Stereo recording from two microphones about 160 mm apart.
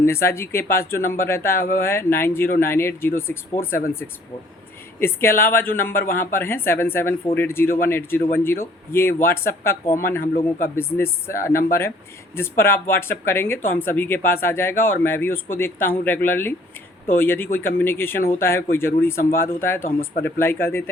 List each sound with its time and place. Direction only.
0.0 s a woman's voice: 15° left (ahead or behind)
4.9 s a woman's voice: 15° left (ahead or behind)
10.9 s a woman's voice: 15° left (ahead or behind)